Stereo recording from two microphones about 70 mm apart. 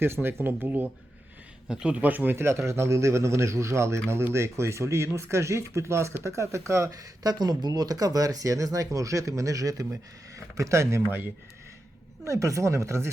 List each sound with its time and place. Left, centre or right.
0.0 s speech: right
1.6 s speech: centre; by 11.0 s right
12.2 s speech: right